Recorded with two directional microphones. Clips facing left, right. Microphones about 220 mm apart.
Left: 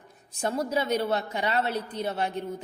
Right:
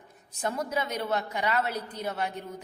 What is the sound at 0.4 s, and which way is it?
A woman's voice, 30° left (ahead or behind).